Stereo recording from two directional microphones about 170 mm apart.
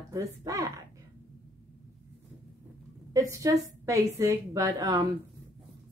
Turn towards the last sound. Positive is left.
turn(degrees=-20)  # may be behind; listen again after turning